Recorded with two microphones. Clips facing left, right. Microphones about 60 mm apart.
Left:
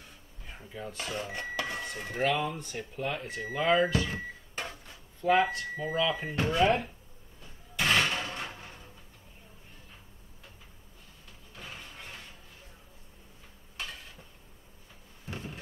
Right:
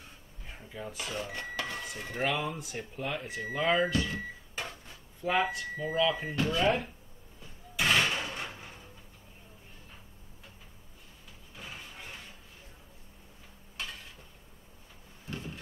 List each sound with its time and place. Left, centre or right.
0.6 s speech: centre
5.2 s speech: centre
6.3 s speech: left
7.7 s a sound: centre
11.5 s music: centre
15.2 s vehicle: left